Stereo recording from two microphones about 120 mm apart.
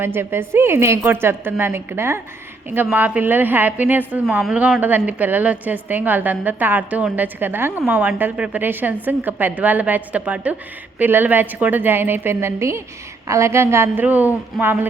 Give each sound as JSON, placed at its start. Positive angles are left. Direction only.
{"t": 0.0, "sound": "a woman's voice", "side_deg": -20}